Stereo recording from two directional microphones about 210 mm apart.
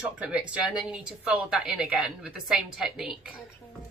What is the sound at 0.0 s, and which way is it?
Speech, 5° right (ahead or behind).